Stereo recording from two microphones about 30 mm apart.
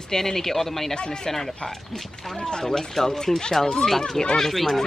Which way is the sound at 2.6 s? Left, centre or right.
Centre.